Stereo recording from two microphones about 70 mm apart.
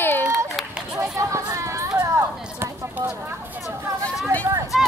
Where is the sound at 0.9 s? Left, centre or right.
Right.